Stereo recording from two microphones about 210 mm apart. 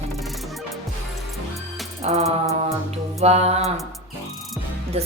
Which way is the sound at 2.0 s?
30° right (ahead or behind).